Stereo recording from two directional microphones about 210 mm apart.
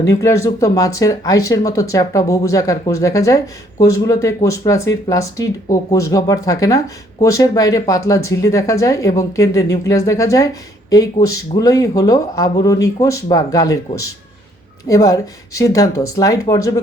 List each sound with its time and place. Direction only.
0.0 s speech: 15° left (ahead or behind)